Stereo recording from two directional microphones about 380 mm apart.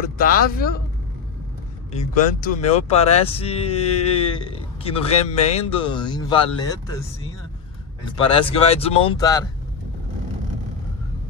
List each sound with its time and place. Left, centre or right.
0.2 s speech: left
1.9 s speech: centre
8.2 s speech: centre